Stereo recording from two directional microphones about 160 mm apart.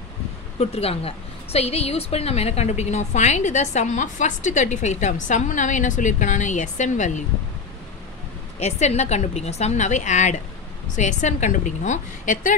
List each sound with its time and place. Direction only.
0.6 s a woman's voice: 40° left (ahead or behind)
8.5 s a woman's voice: 45° left (ahead or behind)